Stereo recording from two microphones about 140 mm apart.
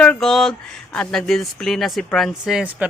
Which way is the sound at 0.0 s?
5° left (ahead or behind).